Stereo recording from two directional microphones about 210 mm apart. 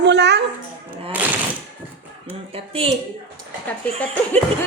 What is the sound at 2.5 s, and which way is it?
Speech, 25° right (ahead or behind).